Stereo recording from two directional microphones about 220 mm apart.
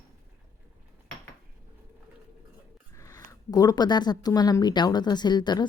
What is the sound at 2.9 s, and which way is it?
Speech, 15° left (ahead or behind).